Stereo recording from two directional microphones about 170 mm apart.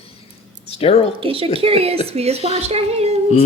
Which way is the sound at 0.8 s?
35° left (ahead or behind).